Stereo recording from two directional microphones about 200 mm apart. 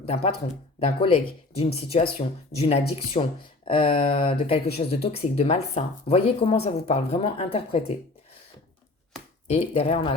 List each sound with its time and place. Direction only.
0.0 s speech: 30° left (ahead or behind)
9.5 s speech: 30° left (ahead or behind)